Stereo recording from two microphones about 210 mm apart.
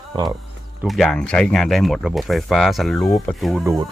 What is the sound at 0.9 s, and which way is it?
Speech, centre (ahead or behind).